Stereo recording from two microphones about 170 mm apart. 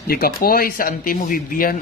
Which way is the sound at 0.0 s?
60° left (ahead or behind).